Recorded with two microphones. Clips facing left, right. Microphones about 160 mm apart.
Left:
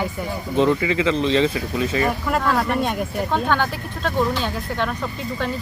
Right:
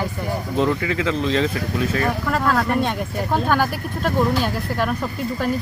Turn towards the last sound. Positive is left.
turn(degrees=-10)  # may be behind; listen again after turning